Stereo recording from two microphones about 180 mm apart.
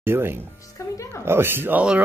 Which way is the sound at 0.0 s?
15° right (ahead or behind).